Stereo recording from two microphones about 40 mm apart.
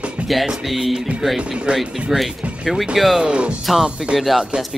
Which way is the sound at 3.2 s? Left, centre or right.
Right.